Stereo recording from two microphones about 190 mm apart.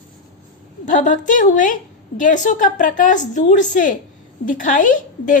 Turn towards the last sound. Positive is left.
turn(degrees=45)  # may be behind; listen again after turning